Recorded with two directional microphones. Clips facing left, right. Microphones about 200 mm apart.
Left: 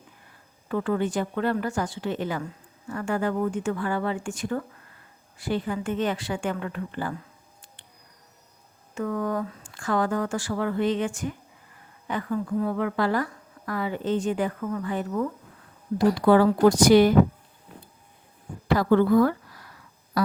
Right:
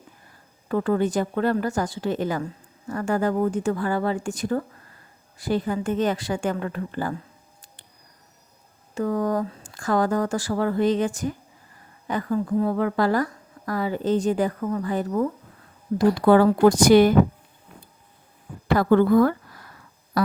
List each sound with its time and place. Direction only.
0.7 s a woman's voice: 40° right (ahead or behind)
9.0 s a woman's voice: 35° right (ahead or behind)
16.0 s a woman's voice: 50° right (ahead or behind)
18.7 s a woman's voice: 50° right (ahead or behind)
20.1 s a sound: 55° right (ahead or behind)